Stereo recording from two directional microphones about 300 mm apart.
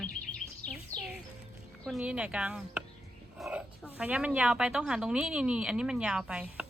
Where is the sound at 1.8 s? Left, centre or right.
Centre.